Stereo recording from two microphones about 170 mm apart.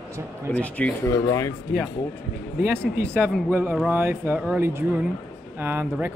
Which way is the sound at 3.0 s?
10° right (ahead or behind).